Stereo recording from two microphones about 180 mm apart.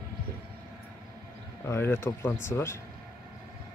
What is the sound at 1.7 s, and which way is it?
A man's voice, 15° left (ahead or behind).